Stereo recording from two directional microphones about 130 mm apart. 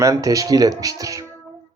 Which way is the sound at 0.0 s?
25° right (ahead or behind).